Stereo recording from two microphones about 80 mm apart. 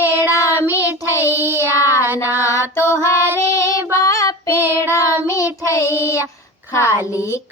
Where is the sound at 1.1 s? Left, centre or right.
Left.